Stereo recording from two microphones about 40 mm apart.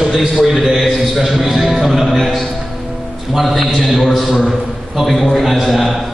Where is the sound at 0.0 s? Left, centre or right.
Centre.